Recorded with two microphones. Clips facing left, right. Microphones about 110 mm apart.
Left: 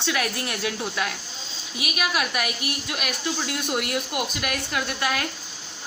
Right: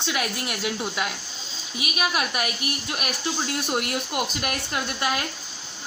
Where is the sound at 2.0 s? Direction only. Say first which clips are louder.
Even; 35° right (ahead or behind).